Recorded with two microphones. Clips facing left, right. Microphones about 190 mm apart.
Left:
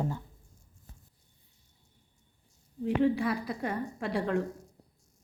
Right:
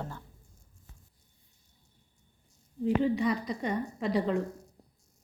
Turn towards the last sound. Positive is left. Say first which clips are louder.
# right 2 dB
turn(degrees=0)  # may be behind; listen again after turning